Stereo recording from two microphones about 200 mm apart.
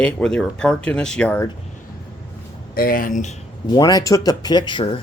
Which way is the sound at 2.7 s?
45° left (ahead or behind).